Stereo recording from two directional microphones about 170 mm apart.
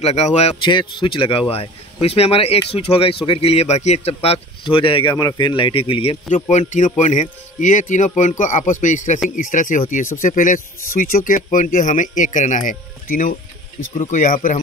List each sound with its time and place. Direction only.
0.0 s speech: 40° left (ahead or behind)
6.3 s speech: 45° left (ahead or behind)